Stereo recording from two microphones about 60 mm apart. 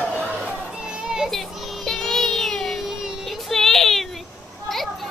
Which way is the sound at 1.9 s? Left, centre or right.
Centre.